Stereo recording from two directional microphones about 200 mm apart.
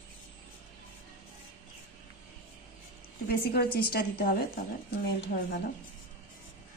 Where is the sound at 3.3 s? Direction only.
50° left (ahead or behind).